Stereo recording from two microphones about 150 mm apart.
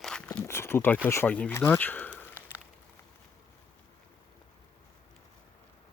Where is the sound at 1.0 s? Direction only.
15° left (ahead or behind).